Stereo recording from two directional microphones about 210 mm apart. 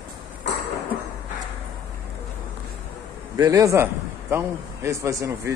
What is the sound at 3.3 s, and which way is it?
A man's voice, 15° right (ahead or behind).